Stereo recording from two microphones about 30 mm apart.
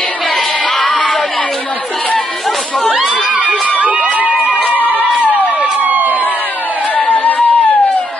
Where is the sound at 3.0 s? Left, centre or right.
Right.